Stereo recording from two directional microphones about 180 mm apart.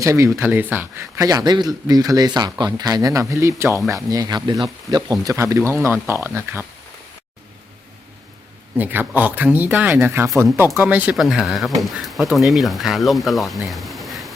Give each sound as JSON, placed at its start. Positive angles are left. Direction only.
{"t": 0.0, "sound": "speech", "side_deg": -15}
{"t": 8.8, "sound": "speech", "side_deg": -10}